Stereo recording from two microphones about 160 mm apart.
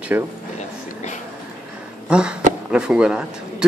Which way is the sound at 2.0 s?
5° right (ahead or behind).